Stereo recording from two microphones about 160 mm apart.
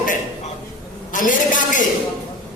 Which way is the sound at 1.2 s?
55° left (ahead or behind).